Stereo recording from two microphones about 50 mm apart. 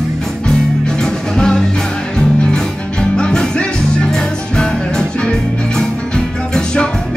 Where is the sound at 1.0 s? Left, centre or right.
Centre.